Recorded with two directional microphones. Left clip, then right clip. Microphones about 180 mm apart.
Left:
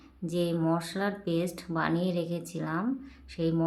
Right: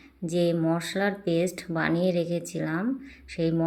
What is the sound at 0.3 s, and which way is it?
A woman's voice, 10° right (ahead or behind).